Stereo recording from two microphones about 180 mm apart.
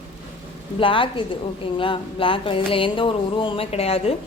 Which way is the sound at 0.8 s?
30° left (ahead or behind).